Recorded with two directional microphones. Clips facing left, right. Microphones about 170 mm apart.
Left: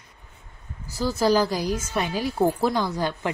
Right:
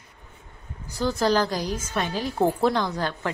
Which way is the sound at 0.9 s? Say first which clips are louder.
Left 1 dB; 5° left (ahead or behind).